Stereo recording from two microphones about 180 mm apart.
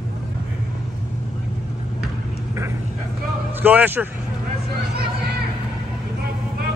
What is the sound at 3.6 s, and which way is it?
Speech, 10° right (ahead or behind).